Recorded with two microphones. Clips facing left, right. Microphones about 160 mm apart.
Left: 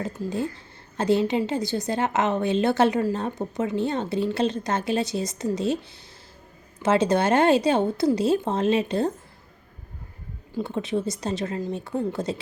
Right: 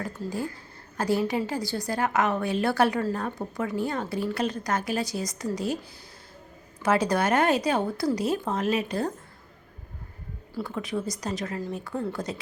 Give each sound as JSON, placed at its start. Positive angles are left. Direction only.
{"t": 0.0, "sound": "a woman's voice", "side_deg": 20}
{"t": 6.8, "sound": "a woman's voice", "side_deg": 25}
{"t": 10.5, "sound": "a woman's voice", "side_deg": 25}